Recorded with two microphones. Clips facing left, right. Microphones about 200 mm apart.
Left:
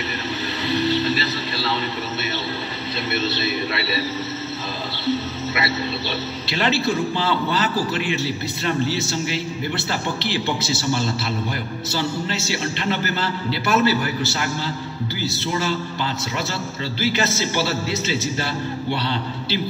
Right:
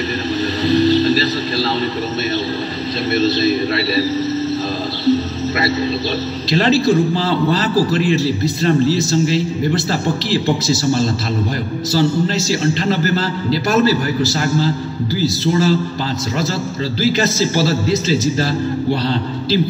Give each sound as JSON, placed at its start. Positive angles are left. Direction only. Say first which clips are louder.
{"t": 0.7, "sound": "music", "louder": "right 8 dB", "side_deg": -35}
{"t": 3.2, "sound": "a man's voice", "louder": "right 10 dB", "side_deg": -40}
{"t": 5.0, "sound": "music", "louder": "right 7 dB", "side_deg": -40}
{"t": 6.5, "sound": "a man's voice", "louder": "right 8 dB", "side_deg": -35}
{"t": 17.0, "sound": "a man's voice", "louder": "right 6 dB", "side_deg": -35}